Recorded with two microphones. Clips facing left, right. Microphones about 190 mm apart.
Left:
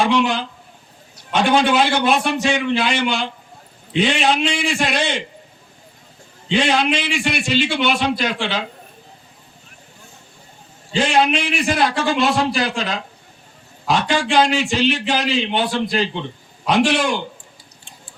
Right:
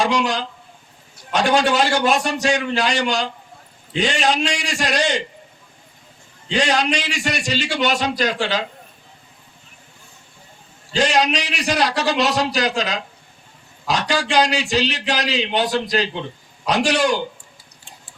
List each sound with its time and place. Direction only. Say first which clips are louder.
0.0 s a man's voice: left 2 dB; 40° right (ahead or behind)
6.5 s a man's voice: left 2 dB; 40° right (ahead or behind)
10.9 s a man's voice: left 1 dB; 40° right (ahead or behind)